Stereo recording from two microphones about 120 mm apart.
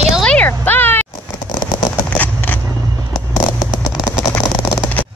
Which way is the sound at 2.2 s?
15° left (ahead or behind).